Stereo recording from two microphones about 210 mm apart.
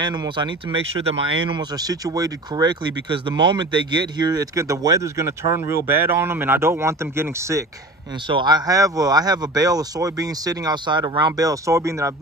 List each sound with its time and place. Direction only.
0.0 s speech: 20° right (ahead or behind)
1.6 s speech: 20° right (ahead or behind)